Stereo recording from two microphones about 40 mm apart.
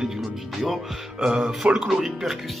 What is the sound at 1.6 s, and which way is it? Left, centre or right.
Speech, right.